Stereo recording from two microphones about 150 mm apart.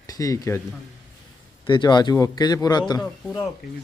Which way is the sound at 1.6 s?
30° left (ahead or behind).